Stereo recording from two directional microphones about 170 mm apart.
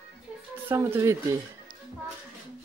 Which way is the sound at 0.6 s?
15° right (ahead or behind).